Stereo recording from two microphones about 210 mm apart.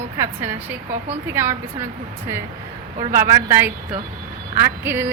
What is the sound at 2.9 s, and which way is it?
Speech, 35° right (ahead or behind).